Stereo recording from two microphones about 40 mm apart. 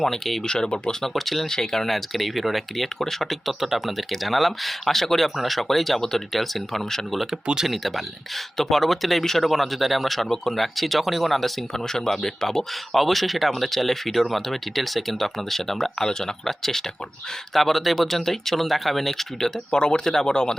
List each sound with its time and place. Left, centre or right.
0.0 s speech: centre
0.4 s speech: left
1.0 s speech: centre
19.7 s speech: left